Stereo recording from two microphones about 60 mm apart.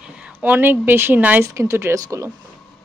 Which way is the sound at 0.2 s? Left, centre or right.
Right.